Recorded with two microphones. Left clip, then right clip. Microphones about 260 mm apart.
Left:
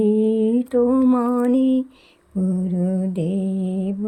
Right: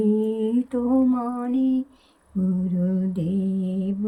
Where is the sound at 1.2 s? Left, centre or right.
Centre.